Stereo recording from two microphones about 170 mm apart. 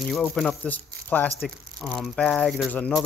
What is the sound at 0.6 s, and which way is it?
Speech, 10° left (ahead or behind).